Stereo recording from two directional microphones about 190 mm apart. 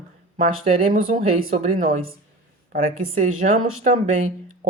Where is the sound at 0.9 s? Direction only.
45° right (ahead or behind).